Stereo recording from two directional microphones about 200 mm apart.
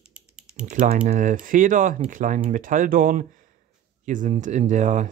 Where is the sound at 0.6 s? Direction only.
40° right (ahead or behind).